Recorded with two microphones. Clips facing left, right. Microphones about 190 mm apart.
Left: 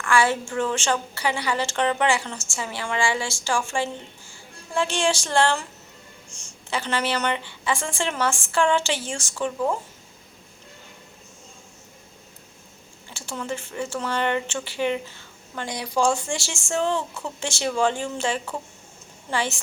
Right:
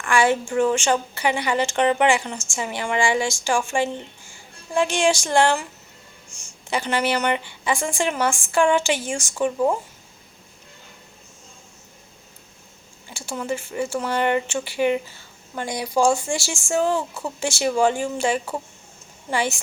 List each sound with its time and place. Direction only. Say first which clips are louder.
0.0 s a woman's voice: right 2 dB; 15° right (ahead or behind)
13.1 s speech: right 3 dB; 10° right (ahead or behind)